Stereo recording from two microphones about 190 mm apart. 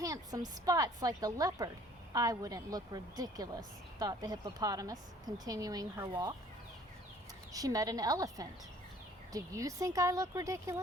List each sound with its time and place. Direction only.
0.0 s a woman's voice: 20° right (ahead or behind)
7.5 s a woman's voice: 20° right (ahead or behind)